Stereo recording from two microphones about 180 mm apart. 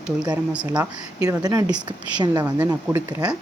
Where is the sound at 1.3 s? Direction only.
20° right (ahead or behind).